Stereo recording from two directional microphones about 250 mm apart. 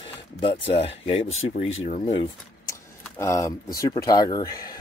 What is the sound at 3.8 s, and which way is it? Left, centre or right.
Speech, centre.